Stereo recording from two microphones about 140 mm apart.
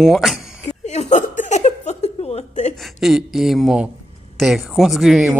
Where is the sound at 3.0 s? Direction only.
Centre (ahead or behind).